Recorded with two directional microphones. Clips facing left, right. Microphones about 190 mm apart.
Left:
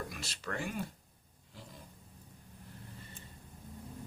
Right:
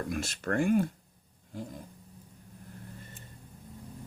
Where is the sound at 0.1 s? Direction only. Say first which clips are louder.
Right 10 dB; 50° right (ahead or behind).